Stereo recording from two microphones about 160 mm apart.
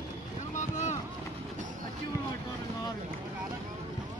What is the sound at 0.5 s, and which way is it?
Boat, 50° left (ahead or behind).